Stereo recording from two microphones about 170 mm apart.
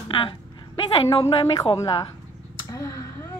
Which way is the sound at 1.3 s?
30° left (ahead or behind).